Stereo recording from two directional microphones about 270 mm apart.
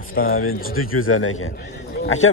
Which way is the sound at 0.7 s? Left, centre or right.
Left.